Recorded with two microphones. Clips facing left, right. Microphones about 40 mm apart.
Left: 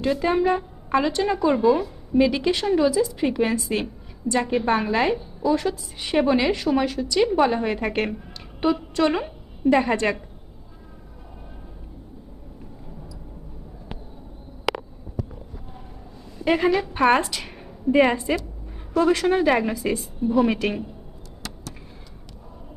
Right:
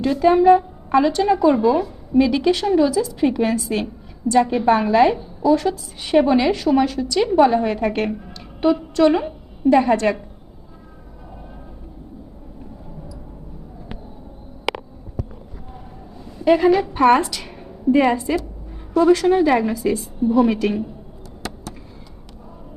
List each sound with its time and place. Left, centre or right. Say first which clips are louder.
0.0 s a woman's voice: right 7 dB; centre
2.1 s a woman's voice: right 3 dB; centre
3.2 s a woman's voice: right 3 dB; centre
16.4 s a woman's voice: right 6 dB; centre
21.4 s a sound: right 6 dB; right